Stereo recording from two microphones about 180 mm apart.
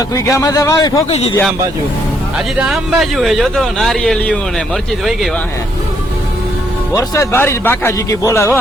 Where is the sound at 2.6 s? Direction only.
Centre (ahead or behind).